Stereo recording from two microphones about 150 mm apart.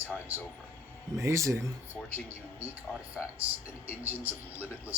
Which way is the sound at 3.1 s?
10° right (ahead or behind).